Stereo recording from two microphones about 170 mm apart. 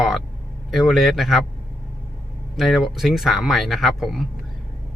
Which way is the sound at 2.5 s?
Centre (ahead or behind).